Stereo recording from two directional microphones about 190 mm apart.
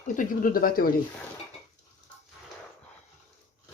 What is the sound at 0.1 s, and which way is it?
Speech, 45° left (ahead or behind).